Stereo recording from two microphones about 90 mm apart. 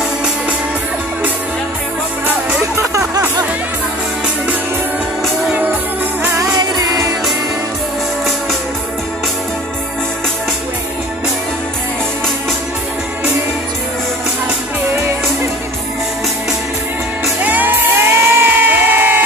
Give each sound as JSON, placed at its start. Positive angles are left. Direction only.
{"t": 6.3, "sound": "music", "side_deg": -40}
{"t": 17.4, "sound": "music", "side_deg": -15}